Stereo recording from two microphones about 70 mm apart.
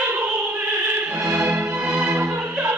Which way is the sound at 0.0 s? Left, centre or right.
Right.